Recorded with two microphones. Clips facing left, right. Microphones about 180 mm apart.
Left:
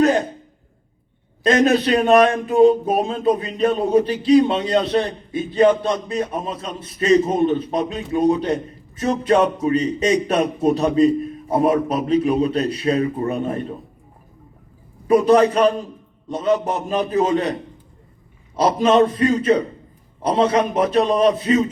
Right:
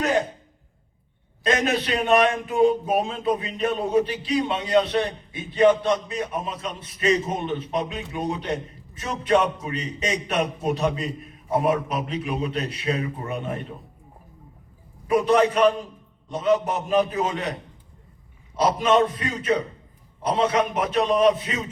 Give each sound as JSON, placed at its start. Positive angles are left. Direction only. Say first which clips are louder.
{"t": 1.5, "sound": "speech", "louder": "left 7 dB", "side_deg": 40}
{"t": 15.0, "sound": "speech", "louder": "left 5 dB", "side_deg": 35}
{"t": 18.5, "sound": "speech", "louder": "left 4 dB", "side_deg": 35}